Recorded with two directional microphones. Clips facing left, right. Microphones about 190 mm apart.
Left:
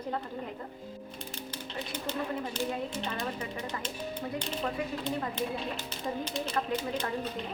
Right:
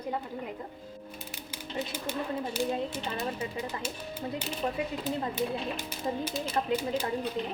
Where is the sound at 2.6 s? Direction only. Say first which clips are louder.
Right 4 dB; 5° right (ahead or behind).